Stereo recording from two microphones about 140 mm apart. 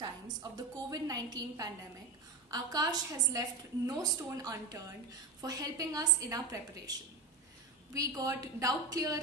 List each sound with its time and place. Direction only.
0.0 s a woman's voice: 25° right (ahead or behind)